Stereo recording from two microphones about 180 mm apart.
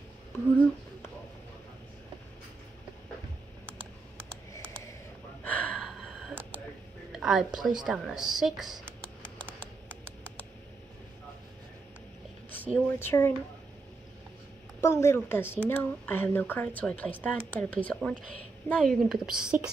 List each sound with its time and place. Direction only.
5.4 s gasp: 10° left (ahead or behind)
7.1 s a sound: 5° right (ahead or behind)
7.8 s speech: 5° right (ahead or behind)
12.7 s speech: 10° left (ahead or behind)
14.8 s speech: 15° left (ahead or behind); by 19.7 s 5° right (ahead or behind)